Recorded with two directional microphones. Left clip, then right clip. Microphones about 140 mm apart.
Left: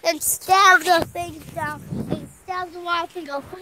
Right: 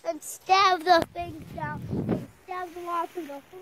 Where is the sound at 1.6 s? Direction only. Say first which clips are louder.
Left 7 dB; 45° left (ahead or behind).